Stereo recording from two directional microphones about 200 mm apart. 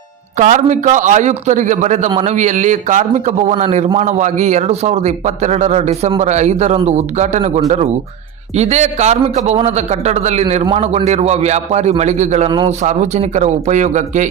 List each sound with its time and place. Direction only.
0.3 s a man's voice: 35° right (ahead or behind)
12.5 s a man's voice: 25° right (ahead or behind)
12.8 s a man's voice: 35° right (ahead or behind)